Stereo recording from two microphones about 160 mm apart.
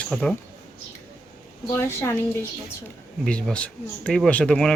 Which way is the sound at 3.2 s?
5° left (ahead or behind).